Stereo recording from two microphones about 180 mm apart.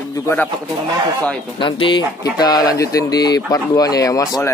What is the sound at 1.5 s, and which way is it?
A man's voice, 25° left (ahead or behind).